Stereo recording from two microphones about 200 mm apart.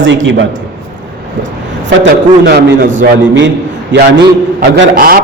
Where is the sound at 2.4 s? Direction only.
50° right (ahead or behind).